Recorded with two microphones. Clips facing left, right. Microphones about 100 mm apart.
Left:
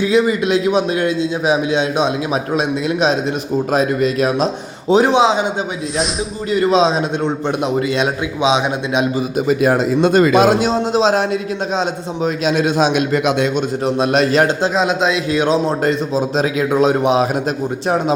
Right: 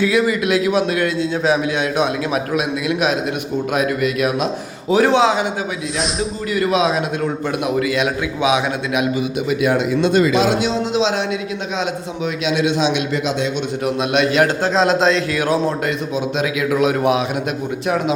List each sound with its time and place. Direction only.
0.0 s a man's voice: 25° left (ahead or behind)
4.9 s a man's voice: 20° left (ahead or behind)
6.5 s a man's voice: 25° left (ahead or behind); by 13.5 s 50° left (ahead or behind)
13.8 s a man's voice: 35° left (ahead or behind)
14.7 s a man's voice: 5° left (ahead or behind)
15.3 s a man's voice: 20° left (ahead or behind)
15.8 s a man's voice: 35° left (ahead or behind)